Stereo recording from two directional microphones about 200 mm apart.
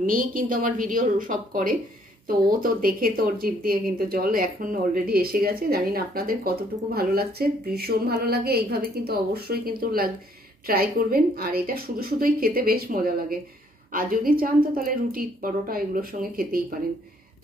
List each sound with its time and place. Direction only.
0.0 s speech: 45° right (ahead or behind)